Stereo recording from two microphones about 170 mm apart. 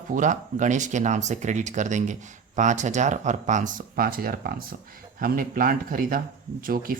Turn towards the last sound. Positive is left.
turn(degrees=-55)  # may be behind; listen again after turning